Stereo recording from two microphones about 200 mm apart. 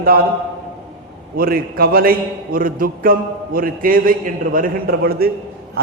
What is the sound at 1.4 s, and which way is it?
A man's voice, 45° right (ahead or behind).